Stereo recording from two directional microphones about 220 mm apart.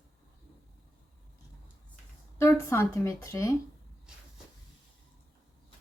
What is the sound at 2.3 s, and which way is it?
Speech, 10° left (ahead or behind).